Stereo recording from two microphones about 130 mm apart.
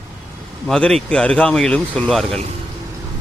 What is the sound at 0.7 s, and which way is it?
Speech, 5° left (ahead or behind).